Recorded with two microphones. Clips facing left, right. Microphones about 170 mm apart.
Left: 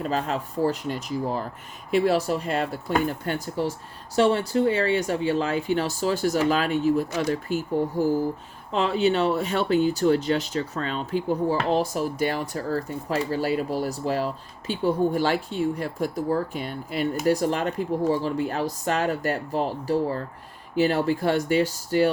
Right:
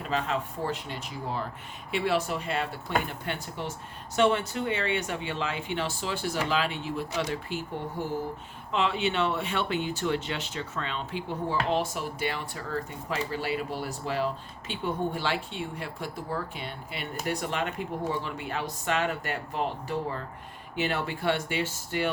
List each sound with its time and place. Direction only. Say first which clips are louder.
0.0 s speech: left 3 dB; 40° left (ahead or behind)